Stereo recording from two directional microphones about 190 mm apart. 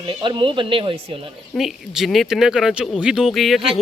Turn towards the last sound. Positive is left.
turn(degrees=0)  # may be behind; listen again after turning